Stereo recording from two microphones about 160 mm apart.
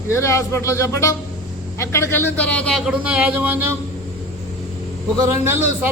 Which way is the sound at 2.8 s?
10° right (ahead or behind).